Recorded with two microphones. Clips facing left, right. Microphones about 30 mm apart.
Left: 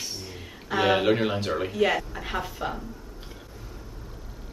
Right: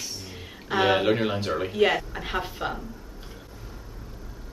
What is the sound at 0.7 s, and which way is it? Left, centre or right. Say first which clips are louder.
Speech: even; centre.